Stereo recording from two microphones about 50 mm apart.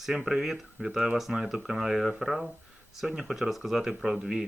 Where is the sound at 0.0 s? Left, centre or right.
Centre.